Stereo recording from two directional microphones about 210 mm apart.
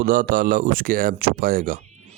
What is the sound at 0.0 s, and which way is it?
Speech, 40° right (ahead or behind).